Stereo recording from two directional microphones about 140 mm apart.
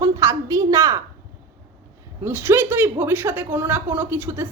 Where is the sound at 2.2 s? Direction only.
15° right (ahead or behind).